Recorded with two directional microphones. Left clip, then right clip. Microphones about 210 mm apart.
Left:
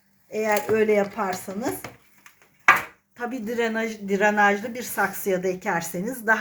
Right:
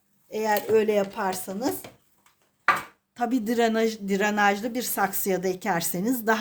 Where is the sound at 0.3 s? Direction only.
75° right (ahead or behind); by 1.7 s 60° right (ahead or behind).